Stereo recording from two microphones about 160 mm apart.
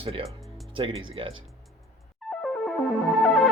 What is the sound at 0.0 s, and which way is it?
Speech, 35° right (ahead or behind).